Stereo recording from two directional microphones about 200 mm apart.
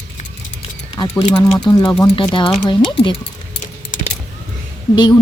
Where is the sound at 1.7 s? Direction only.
20° left (ahead or behind).